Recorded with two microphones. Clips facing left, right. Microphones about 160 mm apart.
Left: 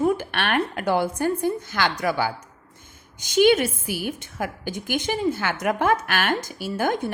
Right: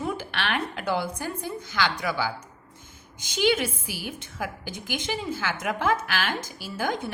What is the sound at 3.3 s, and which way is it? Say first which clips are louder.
A woman's voice: left 7 dB; 50° left (ahead or behind).